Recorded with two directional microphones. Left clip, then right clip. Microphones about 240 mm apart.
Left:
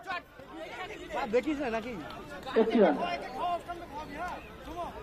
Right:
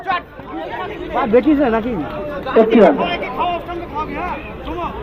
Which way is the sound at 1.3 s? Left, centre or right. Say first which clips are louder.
Right 17 dB; right.